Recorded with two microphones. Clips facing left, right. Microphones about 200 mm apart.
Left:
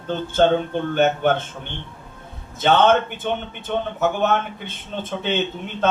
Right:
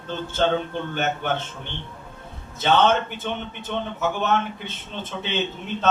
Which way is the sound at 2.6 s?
55° left (ahead or behind).